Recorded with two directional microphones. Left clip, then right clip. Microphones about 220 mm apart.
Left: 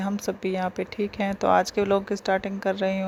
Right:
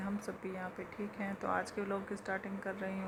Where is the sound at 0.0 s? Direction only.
35° left (ahead or behind).